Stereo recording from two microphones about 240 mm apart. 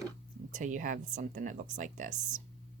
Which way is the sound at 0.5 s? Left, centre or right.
Right.